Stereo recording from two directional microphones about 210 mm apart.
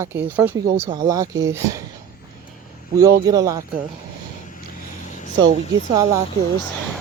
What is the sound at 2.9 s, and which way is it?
Speech, 20° right (ahead or behind).